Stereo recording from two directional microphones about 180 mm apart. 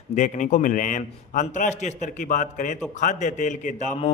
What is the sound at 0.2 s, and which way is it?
Speech, 45° left (ahead or behind).